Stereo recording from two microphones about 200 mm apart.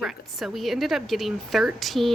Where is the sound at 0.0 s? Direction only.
Centre (ahead or behind).